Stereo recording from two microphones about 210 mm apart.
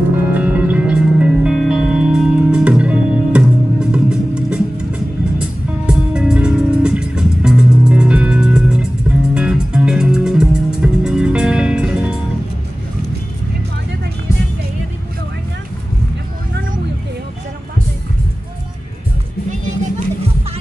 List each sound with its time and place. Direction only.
0.3 s music: 5° right (ahead or behind)